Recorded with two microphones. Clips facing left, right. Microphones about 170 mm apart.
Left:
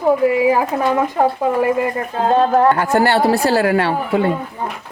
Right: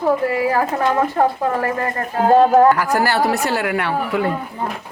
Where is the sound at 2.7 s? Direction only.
25° left (ahead or behind).